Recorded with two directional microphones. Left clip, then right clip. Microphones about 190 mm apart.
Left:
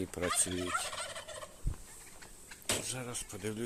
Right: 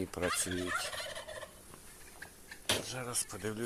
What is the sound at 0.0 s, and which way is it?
Turkey, 15° left (ahead or behind).